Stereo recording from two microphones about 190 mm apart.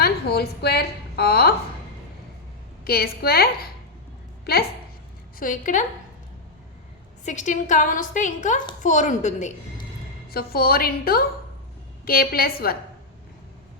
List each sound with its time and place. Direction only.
0.0 s a woman's voice: 55° left (ahead or behind)
2.8 s a woman's voice: 55° left (ahead or behind)
5.4 s a woman's voice: 45° left (ahead or behind)
7.3 s a woman's voice: 40° left (ahead or behind)
10.2 s a woman's voice: 55° left (ahead or behind)